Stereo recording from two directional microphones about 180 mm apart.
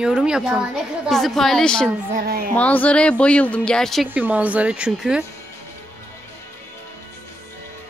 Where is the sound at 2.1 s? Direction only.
50° right (ahead or behind).